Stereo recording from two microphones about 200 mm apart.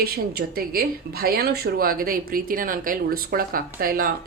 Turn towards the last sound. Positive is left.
turn(degrees=-45)  # may be behind; listen again after turning